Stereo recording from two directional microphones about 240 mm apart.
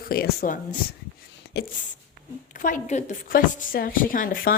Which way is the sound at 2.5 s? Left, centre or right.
Left.